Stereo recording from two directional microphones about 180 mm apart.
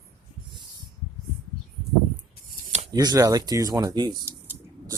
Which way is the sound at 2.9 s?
20° right (ahead or behind).